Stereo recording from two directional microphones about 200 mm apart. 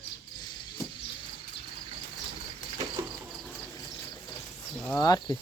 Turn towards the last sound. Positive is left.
turn(degrees=20)  # may be behind; listen again after turning